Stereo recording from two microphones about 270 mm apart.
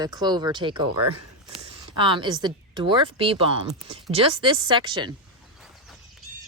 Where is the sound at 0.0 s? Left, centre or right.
Centre.